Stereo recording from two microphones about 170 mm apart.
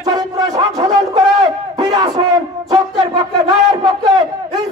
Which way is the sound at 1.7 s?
25° right (ahead or behind).